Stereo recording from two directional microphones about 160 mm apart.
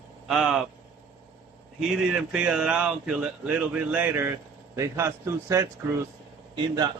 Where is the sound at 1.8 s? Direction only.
5° right (ahead or behind).